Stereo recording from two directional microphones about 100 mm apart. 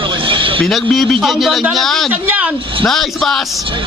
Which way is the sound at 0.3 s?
60° right (ahead or behind).